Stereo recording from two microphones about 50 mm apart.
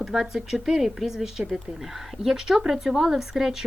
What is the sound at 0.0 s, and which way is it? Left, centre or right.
A woman's voice, centre.